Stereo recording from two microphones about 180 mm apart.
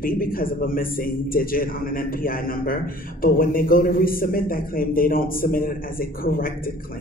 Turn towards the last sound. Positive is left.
turn(degrees=55)  # may be behind; listen again after turning